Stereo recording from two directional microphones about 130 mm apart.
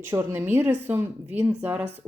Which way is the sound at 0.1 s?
15° right (ahead or behind).